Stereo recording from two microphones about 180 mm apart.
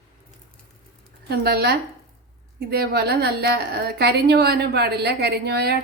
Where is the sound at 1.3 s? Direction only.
60° right (ahead or behind).